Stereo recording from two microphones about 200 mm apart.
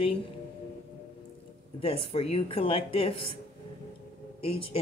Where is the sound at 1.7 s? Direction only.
30° left (ahead or behind).